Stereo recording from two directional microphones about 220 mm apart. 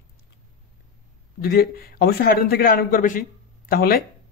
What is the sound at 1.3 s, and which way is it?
Speech, 45° left (ahead or behind).